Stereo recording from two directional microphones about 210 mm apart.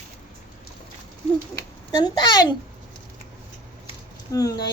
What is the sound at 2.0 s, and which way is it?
Speech, 20° left (ahead or behind).